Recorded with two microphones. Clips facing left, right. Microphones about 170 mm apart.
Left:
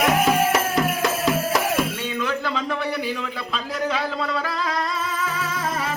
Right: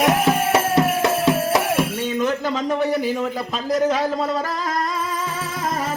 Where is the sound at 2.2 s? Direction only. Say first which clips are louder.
Right 3 dB; 40° right (ahead or behind).